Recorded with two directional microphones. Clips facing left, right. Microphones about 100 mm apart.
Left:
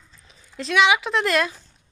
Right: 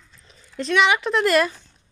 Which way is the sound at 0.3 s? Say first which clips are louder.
Right 3 dB; centre (ahead or behind).